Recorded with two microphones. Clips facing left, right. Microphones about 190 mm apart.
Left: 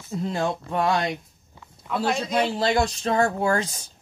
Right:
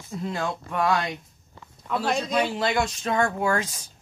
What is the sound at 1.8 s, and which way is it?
Speech, centre (ahead or behind).